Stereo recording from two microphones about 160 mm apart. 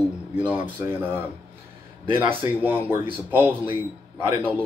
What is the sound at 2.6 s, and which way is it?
Speech, 10° right (ahead or behind).